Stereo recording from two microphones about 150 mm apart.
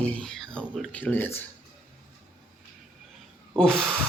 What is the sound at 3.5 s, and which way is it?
Speech, 5° left (ahead or behind).